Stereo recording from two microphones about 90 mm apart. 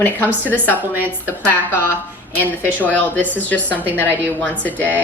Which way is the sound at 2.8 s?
20° left (ahead or behind).